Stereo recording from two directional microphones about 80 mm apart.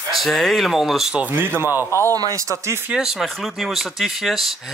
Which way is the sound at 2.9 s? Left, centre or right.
Centre.